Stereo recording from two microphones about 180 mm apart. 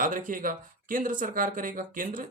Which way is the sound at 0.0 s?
50° right (ahead or behind).